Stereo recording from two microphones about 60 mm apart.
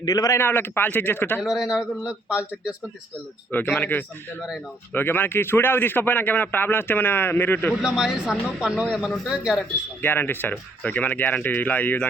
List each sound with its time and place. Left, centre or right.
0.0 s a man's voice: left
0.3 s a man's voice: left
1.4 s a man's voice: centre
3.8 s a man's voice: left
7.8 s a man's voice: centre
8.9 s speech: centre
10.0 s a man's voice: left